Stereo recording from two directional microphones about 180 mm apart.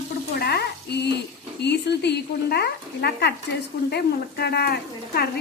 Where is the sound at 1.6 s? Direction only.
70° left (ahead or behind).